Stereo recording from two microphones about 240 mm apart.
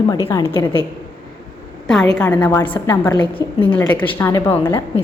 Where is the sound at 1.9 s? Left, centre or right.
Centre.